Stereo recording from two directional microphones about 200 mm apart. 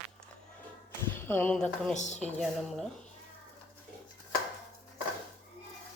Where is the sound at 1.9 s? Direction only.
35° left (ahead or behind).